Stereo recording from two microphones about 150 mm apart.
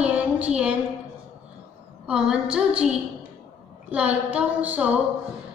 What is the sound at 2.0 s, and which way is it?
A woman's voice, 5° right (ahead or behind).